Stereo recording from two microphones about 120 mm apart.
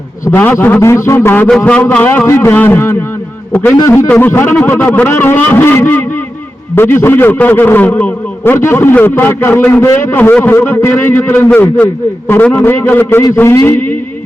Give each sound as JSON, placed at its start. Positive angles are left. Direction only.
{"t": 0.3, "sound": "a man's voice", "side_deg": 15}
{"t": 1.5, "sound": "a man's voice", "side_deg": 10}